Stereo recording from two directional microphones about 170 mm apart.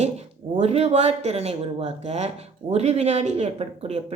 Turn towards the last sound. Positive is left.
turn(degrees=-40)  # may be behind; listen again after turning